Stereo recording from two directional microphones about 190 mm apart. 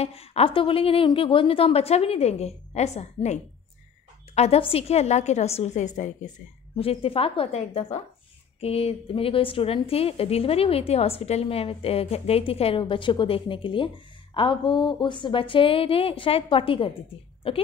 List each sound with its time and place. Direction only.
0.0 s a woman's voice: 30° left (ahead or behind)
4.4 s a woman's voice: 30° left (ahead or behind)